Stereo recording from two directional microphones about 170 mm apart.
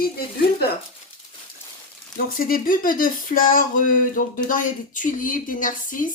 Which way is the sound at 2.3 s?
55° left (ahead or behind).